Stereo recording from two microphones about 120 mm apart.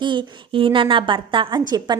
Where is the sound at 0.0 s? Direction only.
40° right (ahead or behind).